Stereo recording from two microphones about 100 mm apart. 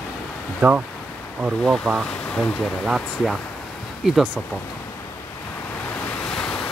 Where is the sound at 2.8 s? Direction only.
5° right (ahead or behind).